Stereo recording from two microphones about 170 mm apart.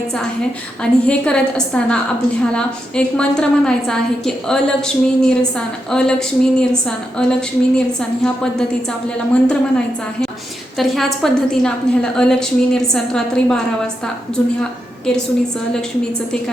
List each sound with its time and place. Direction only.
0.8 s a woman's voice: 5° left (ahead or behind)